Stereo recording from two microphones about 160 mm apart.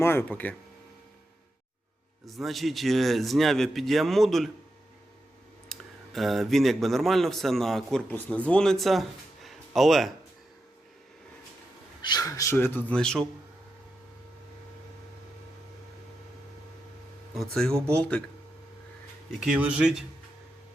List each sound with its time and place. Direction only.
0.0 s speech: 15° left (ahead or behind)
2.2 s a man's voice: centre (ahead or behind)
5.7 s clicking: centre (ahead or behind)
6.1 s a man's voice: centre (ahead or behind)
12.0 s speech: 25° left (ahead or behind); by 13.2 s 5° left (ahead or behind)
17.3 s a man's voice: centre (ahead or behind)
17.7 s speech: 15° right (ahead or behind)
19.4 s a man's voice: 5° right (ahead or behind)